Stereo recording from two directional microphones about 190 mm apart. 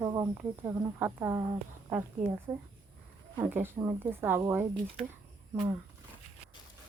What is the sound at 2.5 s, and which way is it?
Speech, 20° right (ahead or behind).